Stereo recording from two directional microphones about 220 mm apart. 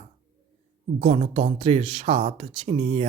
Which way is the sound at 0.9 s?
30° right (ahead or behind).